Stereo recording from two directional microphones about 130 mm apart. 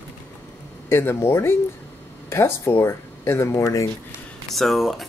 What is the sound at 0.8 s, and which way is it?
Speech, 20° left (ahead or behind).